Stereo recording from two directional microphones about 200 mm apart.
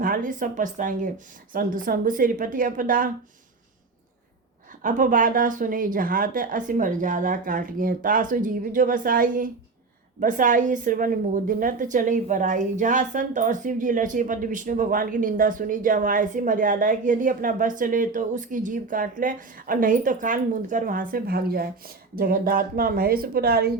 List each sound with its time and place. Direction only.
0.0 s a woman's voice: 45° right (ahead or behind)
4.8 s a woman's voice: 40° right (ahead or behind)